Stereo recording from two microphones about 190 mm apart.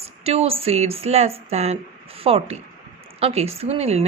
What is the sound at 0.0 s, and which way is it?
A woman's voice, 30° right (ahead or behind).